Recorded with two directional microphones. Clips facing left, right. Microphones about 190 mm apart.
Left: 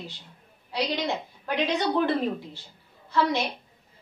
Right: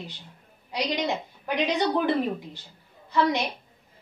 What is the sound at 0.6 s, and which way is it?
A woman's voice, 15° right (ahead or behind).